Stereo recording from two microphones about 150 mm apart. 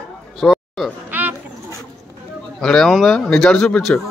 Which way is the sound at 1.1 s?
10° right (ahead or behind).